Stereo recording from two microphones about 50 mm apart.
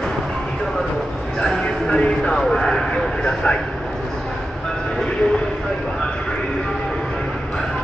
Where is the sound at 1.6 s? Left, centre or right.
Centre.